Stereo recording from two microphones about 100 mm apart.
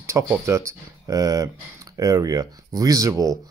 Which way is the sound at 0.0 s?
30° right (ahead or behind).